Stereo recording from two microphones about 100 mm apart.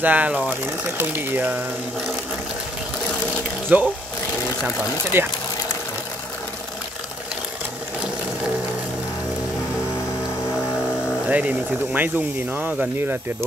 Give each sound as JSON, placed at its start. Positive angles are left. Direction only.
{"t": 0.0, "sound": "speech", "side_deg": -15}
{"t": 3.7, "sound": "speech", "side_deg": -15}
{"t": 5.1, "sound": "speech", "side_deg": -25}
{"t": 11.2, "sound": "speech", "side_deg": -15}